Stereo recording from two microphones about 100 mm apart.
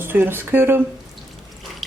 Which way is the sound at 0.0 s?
20° right (ahead or behind).